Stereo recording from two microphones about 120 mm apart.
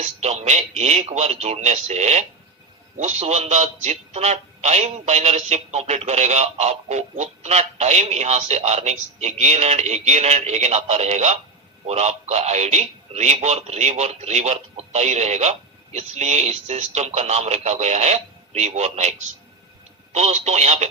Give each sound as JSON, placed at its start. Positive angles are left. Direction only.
{"t": 0.0, "sound": "a man's voice", "side_deg": -70}
{"t": 20.1, "sound": "speech", "side_deg": -65}